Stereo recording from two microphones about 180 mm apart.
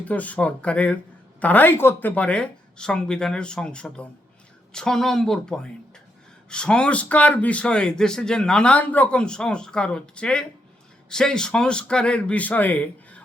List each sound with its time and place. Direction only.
0.0 s speech: 10° left (ahead or behind)